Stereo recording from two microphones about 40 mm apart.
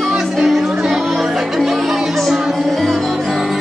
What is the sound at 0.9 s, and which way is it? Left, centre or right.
Music, centre.